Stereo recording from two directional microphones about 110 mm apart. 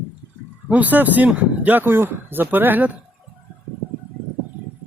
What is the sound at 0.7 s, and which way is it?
Speech, 15° right (ahead or behind).